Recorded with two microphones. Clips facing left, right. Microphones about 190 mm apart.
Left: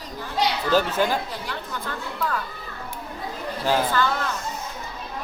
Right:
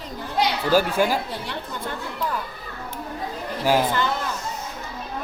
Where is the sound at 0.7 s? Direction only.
10° right (ahead or behind).